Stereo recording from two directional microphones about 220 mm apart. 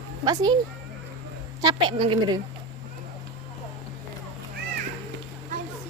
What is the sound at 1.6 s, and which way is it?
Speech, 20° right (ahead or behind).